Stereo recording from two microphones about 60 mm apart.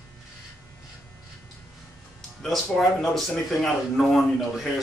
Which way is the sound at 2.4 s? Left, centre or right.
Centre.